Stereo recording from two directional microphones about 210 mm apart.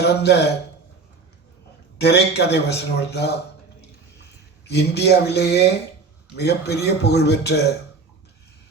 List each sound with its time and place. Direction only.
0.0 s a man's voice: 50° left (ahead or behind)
2.0 s a man's voice: 50° left (ahead or behind)
4.6 s a man's voice: 50° left (ahead or behind)